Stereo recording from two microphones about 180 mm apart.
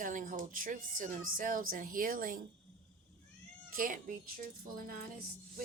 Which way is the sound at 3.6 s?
50° right (ahead or behind).